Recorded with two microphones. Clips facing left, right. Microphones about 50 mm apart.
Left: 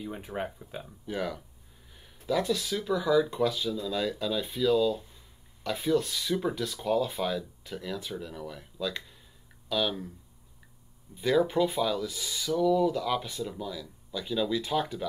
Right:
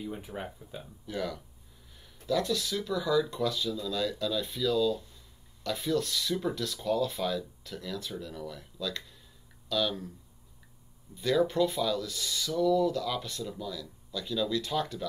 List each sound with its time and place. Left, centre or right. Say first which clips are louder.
0.0 s speech: left 3 dB; left
0.8 s speech: left 2 dB; centre
11.1 s speech: left 1 dB; centre